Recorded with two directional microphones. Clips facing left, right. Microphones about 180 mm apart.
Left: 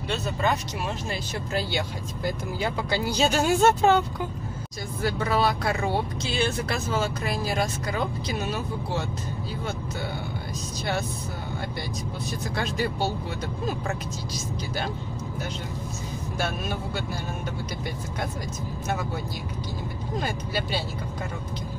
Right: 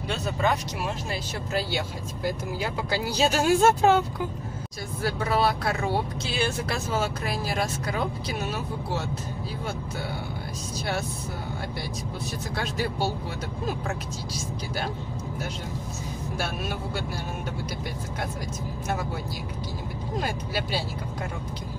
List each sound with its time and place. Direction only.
1.5 s speech: 5° right (ahead or behind)
5.0 s speech: 5° right (ahead or behind)
12.5 s speech: centre (ahead or behind)
16.3 s speech: 5° right (ahead or behind)
20.2 s speech: 5° right (ahead or behind)